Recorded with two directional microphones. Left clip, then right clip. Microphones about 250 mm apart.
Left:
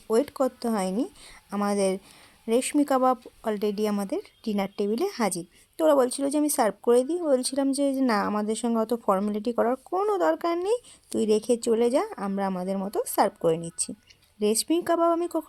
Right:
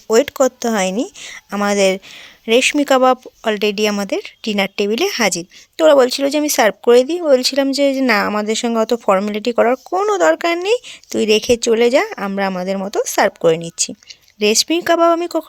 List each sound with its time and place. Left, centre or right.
0.1 s speech: right